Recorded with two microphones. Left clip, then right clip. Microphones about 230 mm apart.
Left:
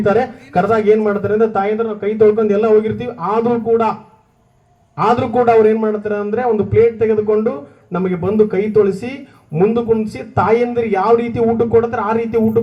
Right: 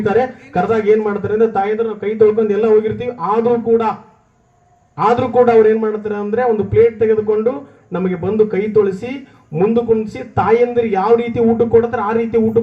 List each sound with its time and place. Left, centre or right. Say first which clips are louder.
0.0 s a man's voice: even; left
4.9 s a man's voice: right 2 dB; left